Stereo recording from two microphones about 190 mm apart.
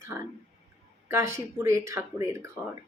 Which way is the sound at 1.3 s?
15° right (ahead or behind).